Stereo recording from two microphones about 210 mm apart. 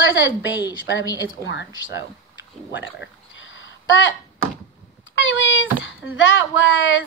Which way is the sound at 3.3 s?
65° left (ahead or behind).